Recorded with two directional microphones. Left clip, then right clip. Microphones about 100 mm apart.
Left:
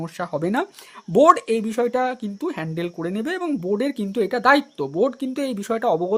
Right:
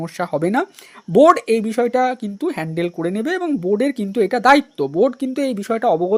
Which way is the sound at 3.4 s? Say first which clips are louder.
Right 4 dB; 20° right (ahead or behind).